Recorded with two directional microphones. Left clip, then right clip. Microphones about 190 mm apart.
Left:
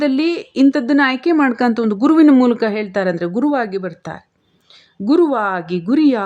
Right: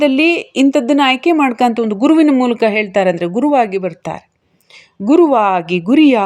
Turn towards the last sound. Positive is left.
turn(degrees=0)  # may be behind; listen again after turning